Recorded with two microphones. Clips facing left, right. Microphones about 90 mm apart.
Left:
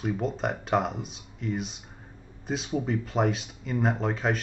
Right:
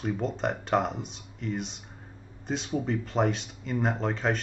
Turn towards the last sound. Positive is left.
turn(degrees=5)  # may be behind; listen again after turning